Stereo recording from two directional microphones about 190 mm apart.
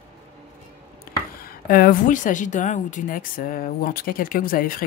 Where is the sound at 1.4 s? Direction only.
50° left (ahead or behind).